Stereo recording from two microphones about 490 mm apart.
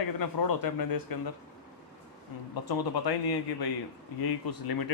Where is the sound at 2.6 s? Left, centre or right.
Left.